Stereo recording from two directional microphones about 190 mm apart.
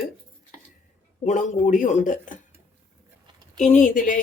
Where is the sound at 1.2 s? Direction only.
40° left (ahead or behind).